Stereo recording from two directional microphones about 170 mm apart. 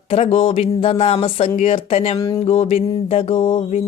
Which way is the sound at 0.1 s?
35° left (ahead or behind).